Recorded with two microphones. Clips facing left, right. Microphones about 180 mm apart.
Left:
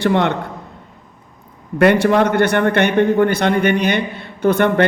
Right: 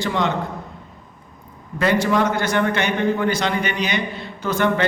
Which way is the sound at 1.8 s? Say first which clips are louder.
Left 6 dB; 60° left (ahead or behind).